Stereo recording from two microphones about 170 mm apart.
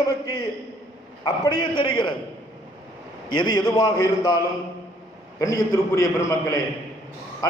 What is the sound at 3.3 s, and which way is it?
A man's voice, 25° left (ahead or behind).